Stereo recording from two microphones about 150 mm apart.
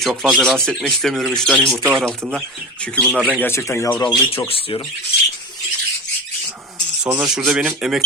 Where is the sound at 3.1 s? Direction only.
10° right (ahead or behind).